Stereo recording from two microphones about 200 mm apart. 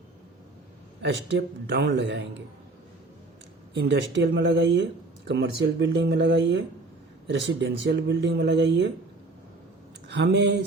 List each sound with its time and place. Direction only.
1.0 s speech: 60° right (ahead or behind)
3.8 s speech: 60° right (ahead or behind)
10.1 s speech: 60° right (ahead or behind)